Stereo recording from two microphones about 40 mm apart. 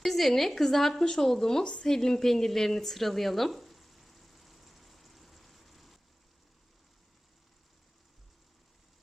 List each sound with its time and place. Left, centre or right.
0.0 s a woman's voice: centre
1.6 s speech: left
1.9 s a sound: centre